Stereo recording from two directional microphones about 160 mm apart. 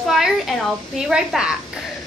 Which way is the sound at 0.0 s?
Centre (ahead or behind).